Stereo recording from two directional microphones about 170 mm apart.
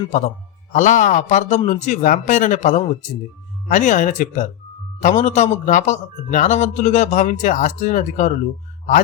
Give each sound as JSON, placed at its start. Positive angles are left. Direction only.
{"t": 0.1, "sound": "a man's voice", "side_deg": 45}